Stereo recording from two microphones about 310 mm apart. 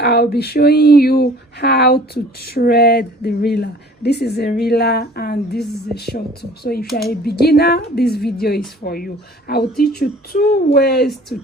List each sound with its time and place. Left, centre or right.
0.0 s speech: left
11.0 s speech: centre